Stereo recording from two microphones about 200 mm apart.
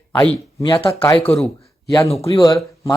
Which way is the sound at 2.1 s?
25° left (ahead or behind).